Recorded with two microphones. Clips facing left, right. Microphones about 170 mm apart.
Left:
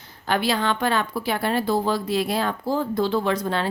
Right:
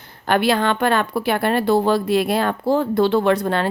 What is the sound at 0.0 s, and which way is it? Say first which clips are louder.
A woman's voice: right 5 dB; 60° right (ahead or behind).